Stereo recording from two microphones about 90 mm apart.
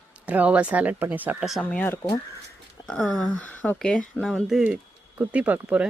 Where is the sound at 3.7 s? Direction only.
5° left (ahead or behind).